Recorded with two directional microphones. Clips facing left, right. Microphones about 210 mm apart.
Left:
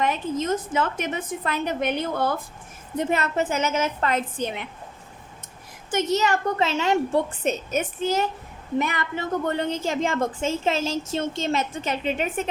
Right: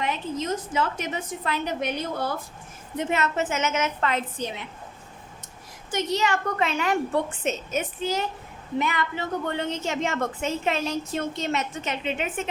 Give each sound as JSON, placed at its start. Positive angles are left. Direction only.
{"t": 0.0, "sound": "a woman's voice", "side_deg": 50}
{"t": 3.1, "sound": "a woman's voice", "side_deg": 35}
{"t": 5.9, "sound": "a woman's voice", "side_deg": 45}
{"t": 6.6, "sound": "a woman's voice", "side_deg": 25}
{"t": 7.7, "sound": "a woman's voice", "side_deg": 45}